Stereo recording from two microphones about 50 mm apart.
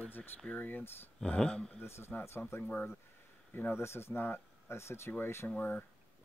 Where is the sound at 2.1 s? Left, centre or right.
Left.